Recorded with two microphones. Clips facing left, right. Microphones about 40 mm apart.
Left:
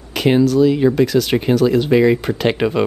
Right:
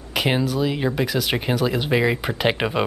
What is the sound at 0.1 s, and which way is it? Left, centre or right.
A woman's voice, centre.